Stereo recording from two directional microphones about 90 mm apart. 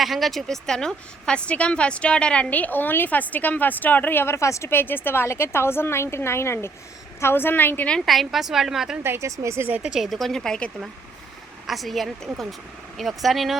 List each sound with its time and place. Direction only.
0.0 s a woman's voice: centre (ahead or behind); by 7.9 s 25° left (ahead or behind)
7.9 s speech: 5° left (ahead or behind)
9.0 s speech: 35° right (ahead or behind)
9.6 s speech: 15° right (ahead or behind)